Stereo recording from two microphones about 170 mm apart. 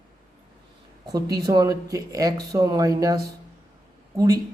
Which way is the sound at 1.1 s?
20° right (ahead or behind).